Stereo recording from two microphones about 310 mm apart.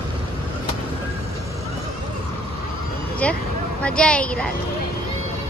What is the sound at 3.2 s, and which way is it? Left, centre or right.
Speech, centre.